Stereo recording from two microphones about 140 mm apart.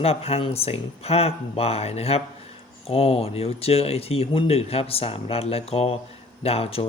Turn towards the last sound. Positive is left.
turn(degrees=45)  # may be behind; listen again after turning